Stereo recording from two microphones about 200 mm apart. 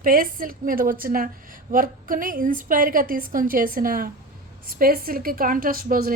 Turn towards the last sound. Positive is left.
turn(degrees=-45)  # may be behind; listen again after turning